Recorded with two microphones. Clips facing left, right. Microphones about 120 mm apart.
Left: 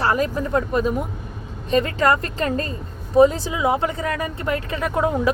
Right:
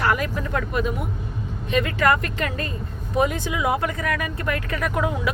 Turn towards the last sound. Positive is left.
turn(degrees=30)  # may be behind; listen again after turning